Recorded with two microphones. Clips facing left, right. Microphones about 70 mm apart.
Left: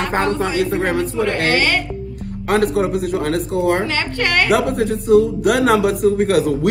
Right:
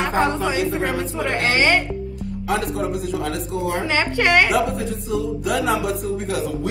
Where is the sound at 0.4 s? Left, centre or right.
Left.